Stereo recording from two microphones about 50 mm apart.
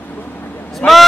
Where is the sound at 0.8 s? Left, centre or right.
Left.